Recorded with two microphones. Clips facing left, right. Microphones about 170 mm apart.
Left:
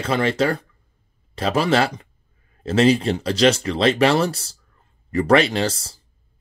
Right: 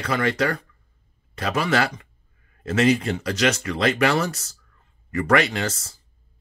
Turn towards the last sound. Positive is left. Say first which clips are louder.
# left 5 dB
turn(degrees=30)  # may be behind; listen again after turning